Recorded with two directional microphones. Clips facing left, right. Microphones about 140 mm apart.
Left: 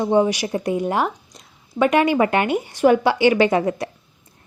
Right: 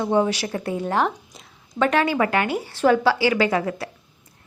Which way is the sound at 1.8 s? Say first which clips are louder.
Left 3 dB; 15° left (ahead or behind).